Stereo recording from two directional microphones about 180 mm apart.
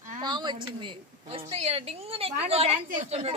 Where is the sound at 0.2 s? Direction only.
25° right (ahead or behind).